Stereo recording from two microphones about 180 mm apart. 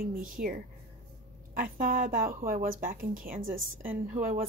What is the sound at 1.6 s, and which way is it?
Speech, 50° right (ahead or behind).